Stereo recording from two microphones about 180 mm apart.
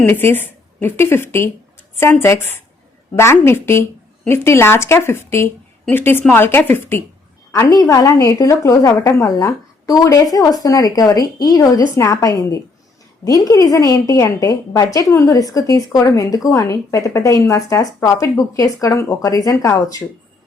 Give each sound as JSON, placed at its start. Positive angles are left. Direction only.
{"t": 0.0, "sound": "a woman's voice", "side_deg": 10}